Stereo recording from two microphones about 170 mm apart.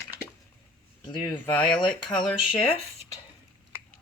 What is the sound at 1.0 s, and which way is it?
Speech, 30° left (ahead or behind).